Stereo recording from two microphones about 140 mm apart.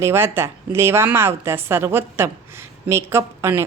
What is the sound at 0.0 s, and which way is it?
A woman's voice, 15° right (ahead or behind).